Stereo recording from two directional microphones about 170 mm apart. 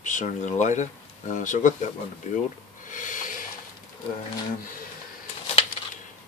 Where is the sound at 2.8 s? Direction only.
50° left (ahead or behind).